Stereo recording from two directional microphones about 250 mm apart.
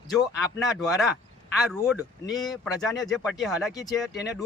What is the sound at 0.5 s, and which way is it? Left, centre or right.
Speech, centre.